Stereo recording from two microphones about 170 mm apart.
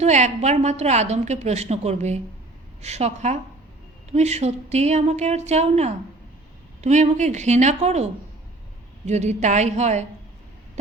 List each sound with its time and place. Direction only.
0.0 s a woman's voice: 40° right (ahead or behind)